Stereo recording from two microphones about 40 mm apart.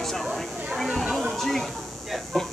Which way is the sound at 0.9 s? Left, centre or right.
Centre.